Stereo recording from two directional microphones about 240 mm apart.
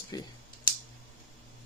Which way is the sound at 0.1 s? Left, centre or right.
Centre.